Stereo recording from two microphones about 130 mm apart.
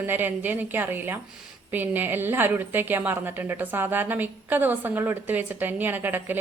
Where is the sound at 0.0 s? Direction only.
15° right (ahead or behind).